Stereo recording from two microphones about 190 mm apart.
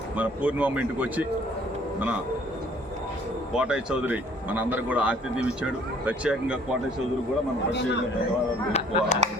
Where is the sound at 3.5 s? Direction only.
5° right (ahead or behind).